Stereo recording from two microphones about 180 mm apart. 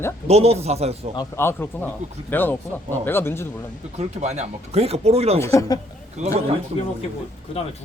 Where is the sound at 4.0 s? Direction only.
40° right (ahead or behind).